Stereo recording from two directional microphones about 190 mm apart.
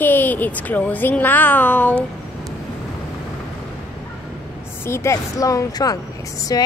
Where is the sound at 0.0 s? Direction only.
10° left (ahead or behind).